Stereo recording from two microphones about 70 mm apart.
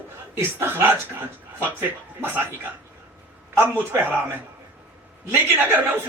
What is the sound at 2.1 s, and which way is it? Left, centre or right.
Speech, right.